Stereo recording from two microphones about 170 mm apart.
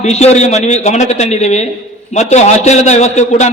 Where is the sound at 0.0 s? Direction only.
40° left (ahead or behind).